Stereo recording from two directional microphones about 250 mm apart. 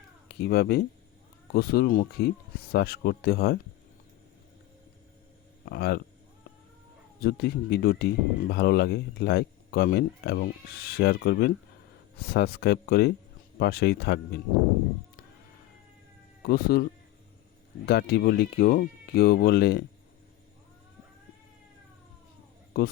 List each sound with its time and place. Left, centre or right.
0.3 s speech: left
5.6 s speech: left
7.2 s speech: left
16.5 s speech: left
17.8 s speech: left
22.8 s speech: left